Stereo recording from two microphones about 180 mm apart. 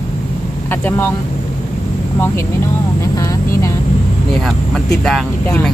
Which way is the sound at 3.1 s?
20° left (ahead or behind).